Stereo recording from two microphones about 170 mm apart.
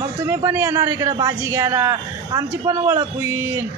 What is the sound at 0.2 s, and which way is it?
Speech, 10° right (ahead or behind).